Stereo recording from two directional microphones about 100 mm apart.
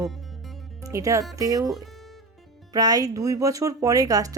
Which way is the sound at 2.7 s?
40° right (ahead or behind).